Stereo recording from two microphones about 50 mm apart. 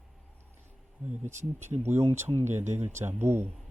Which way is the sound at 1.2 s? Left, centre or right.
Right.